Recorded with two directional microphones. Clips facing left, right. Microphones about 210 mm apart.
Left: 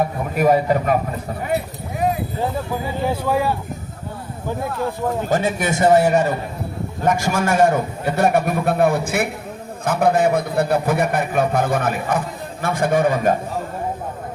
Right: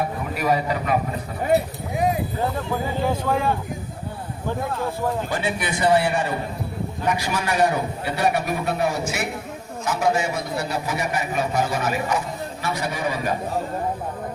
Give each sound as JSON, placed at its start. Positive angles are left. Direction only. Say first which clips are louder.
{"t": 0.3, "sound": "a man's voice", "louder": "left 7 dB", "side_deg": 50}
{"t": 3.1, "sound": "speech", "louder": "left 4 dB", "side_deg": 10}
{"t": 5.3, "sound": "a man's voice", "louder": "left 6 dB", "side_deg": 45}